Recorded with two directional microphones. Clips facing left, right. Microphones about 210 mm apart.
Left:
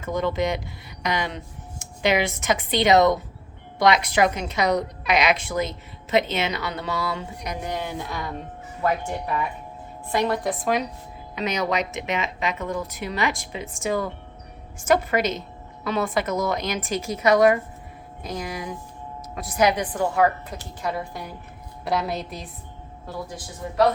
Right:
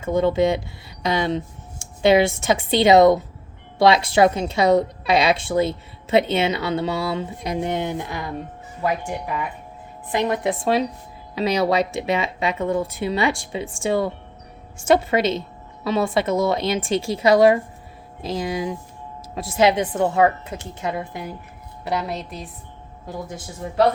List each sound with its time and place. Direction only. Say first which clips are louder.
0.0 s a woman's voice: right 6 dB; 25° right (ahead or behind)
21.8 s a woman's voice: even; centre (ahead or behind)